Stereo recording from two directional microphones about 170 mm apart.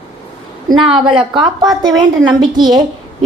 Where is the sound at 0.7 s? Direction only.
30° right (ahead or behind).